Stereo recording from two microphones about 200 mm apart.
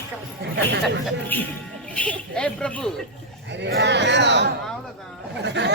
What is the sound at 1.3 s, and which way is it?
A man's voice, 10° left (ahead or behind).